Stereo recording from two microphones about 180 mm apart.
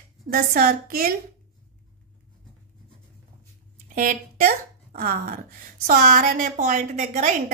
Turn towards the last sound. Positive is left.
turn(degrees=-40)  # may be behind; listen again after turning